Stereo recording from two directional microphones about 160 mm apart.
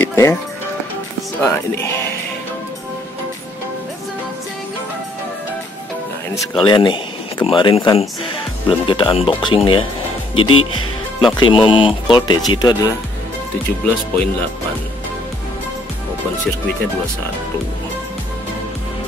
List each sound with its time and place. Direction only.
0.0 s music: 15° left (ahead or behind)
1.4 s speech: 10° left (ahead or behind)
6.6 s speech: 30° left (ahead or behind)
14.1 s speech: 10° left (ahead or behind)